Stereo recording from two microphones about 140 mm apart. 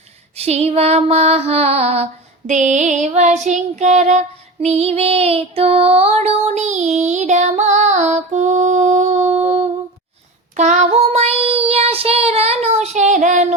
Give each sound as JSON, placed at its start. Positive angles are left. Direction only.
{"t": 0.3, "sound": "female singing", "side_deg": -45}
{"t": 2.5, "sound": "child singing", "side_deg": -60}